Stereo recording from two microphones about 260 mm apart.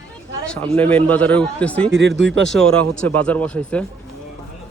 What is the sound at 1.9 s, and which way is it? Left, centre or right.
Speech, right.